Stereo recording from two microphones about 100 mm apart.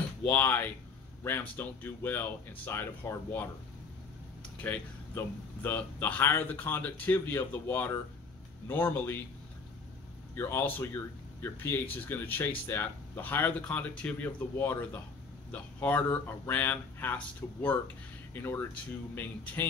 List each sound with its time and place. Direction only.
0.2 s speech: 20° left (ahead or behind)
4.6 s speech: 15° left (ahead or behind)
10.3 s speech: 25° left (ahead or behind)